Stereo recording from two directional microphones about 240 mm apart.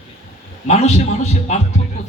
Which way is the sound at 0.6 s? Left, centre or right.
Left.